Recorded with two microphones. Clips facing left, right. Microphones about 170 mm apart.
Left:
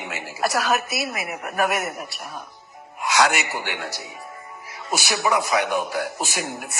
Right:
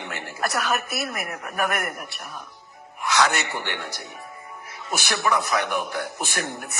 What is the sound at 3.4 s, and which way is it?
Speech, 5° left (ahead or behind).